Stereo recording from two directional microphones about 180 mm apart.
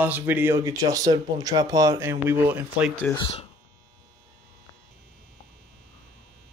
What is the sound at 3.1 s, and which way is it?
Speech, 30° left (ahead or behind).